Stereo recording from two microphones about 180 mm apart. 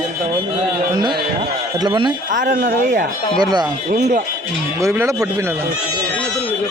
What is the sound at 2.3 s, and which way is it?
Speech, 45° right (ahead or behind).